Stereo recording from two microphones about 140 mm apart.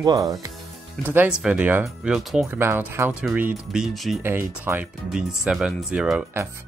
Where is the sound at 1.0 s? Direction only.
10° right (ahead or behind).